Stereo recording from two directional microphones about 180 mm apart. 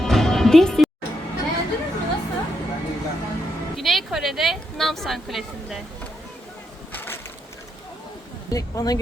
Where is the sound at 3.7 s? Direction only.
Centre (ahead or behind).